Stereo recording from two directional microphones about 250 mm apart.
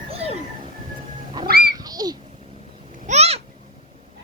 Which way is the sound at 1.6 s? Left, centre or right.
Centre.